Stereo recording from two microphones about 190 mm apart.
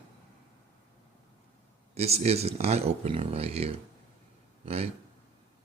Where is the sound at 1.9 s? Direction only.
35° right (ahead or behind).